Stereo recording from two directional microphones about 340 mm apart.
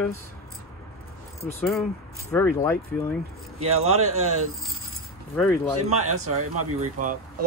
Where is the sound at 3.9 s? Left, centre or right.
Right.